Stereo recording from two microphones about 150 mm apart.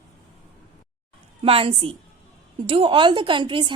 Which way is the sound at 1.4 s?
40° right (ahead or behind).